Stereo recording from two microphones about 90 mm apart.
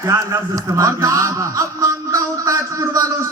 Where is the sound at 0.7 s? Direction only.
40° right (ahead or behind).